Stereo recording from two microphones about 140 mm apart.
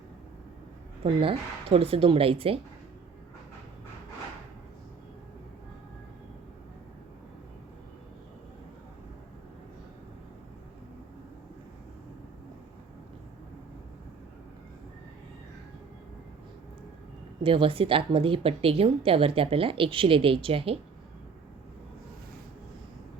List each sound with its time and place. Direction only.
1.0 s a woman's voice: 40° right (ahead or behind)
17.4 s a woman's voice: 40° right (ahead or behind)